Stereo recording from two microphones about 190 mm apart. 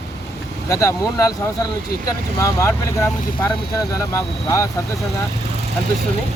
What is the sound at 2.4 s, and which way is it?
Speech, 15° left (ahead or behind).